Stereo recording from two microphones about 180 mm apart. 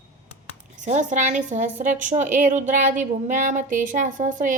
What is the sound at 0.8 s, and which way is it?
A woman's voice, 40° right (ahead or behind).